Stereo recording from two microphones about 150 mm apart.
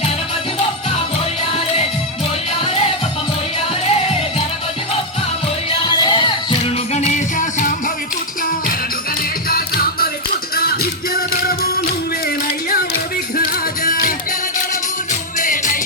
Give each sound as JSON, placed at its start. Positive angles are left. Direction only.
{"t": 1.5, "sound": "music", "side_deg": 40}
{"t": 5.7, "sound": "music", "side_deg": 30}
{"t": 6.9, "sound": "music", "side_deg": 50}
{"t": 9.5, "sound": "music", "side_deg": 80}
{"t": 15.4, "sound": "music", "side_deg": 60}